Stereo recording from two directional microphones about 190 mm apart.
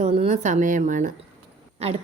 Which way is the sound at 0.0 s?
35° right (ahead or behind).